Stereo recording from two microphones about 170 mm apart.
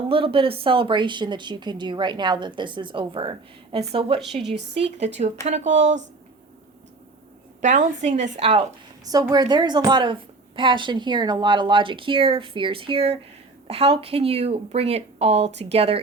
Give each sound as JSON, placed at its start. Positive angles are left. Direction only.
{"t": 0.1, "sound": "a woman's voice", "side_deg": -30}
{"t": 7.6, "sound": "a woman's voice", "side_deg": -45}
{"t": 9.3, "sound": "a woman's voice", "side_deg": -25}